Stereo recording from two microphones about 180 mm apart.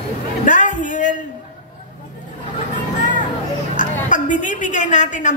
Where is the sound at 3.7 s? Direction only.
45° left (ahead or behind).